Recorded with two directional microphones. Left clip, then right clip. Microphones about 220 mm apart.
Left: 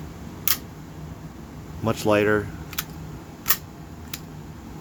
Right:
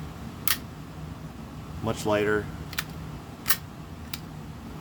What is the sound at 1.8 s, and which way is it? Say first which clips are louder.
Speech: left 5 dB; 20° left (ahead or behind).